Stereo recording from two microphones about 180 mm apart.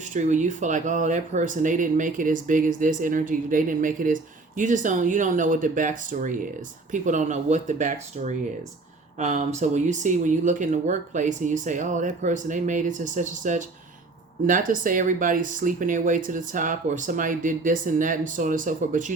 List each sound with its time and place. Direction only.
0.1 s speech: 40° right (ahead or behind)